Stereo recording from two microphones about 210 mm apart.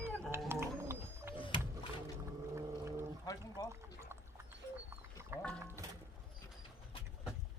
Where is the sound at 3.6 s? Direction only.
10° right (ahead or behind).